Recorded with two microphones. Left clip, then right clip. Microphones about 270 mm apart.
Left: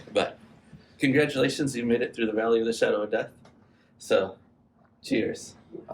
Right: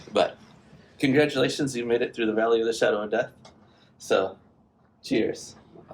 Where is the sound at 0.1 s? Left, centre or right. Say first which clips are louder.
Right 3 dB; centre.